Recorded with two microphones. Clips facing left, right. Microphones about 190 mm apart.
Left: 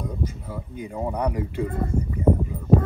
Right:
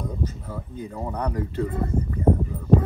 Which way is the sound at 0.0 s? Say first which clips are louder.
Even; 10° left (ahead or behind).